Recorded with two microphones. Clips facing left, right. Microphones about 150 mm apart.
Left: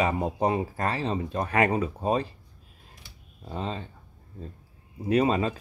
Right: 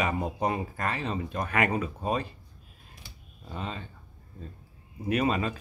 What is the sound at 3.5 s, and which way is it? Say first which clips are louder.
Speech: left 4 dB; 30° left (ahead or behind).